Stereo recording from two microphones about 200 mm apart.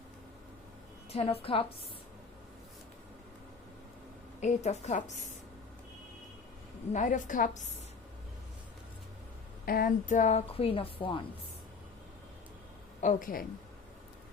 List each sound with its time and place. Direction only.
1.1 s a woman's voice: 30° left (ahead or behind)
4.4 s a woman's voice: 35° left (ahead or behind)
6.9 s a woman's voice: 40° left (ahead or behind)
9.6 s a woman's voice: 45° left (ahead or behind); by 11.2 s 25° left (ahead or behind)
13.0 s a woman's voice: 40° left (ahead or behind)